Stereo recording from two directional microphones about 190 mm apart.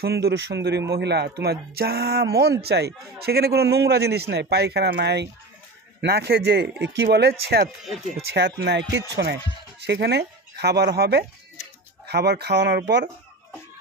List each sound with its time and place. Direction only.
0.0 s a man's voice: 60° right (ahead or behind)